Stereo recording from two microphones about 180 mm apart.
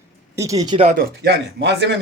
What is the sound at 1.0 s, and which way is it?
Speech, 65° right (ahead or behind).